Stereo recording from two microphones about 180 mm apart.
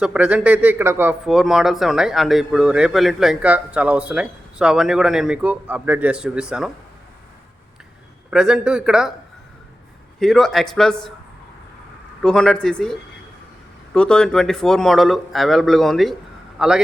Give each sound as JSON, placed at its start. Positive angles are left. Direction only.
{"t": 0.0, "sound": "speech", "side_deg": -5}
{"t": 8.3, "sound": "speech", "side_deg": -5}
{"t": 10.2, "sound": "speech", "side_deg": 5}
{"t": 12.2, "sound": "a man's voice", "side_deg": 5}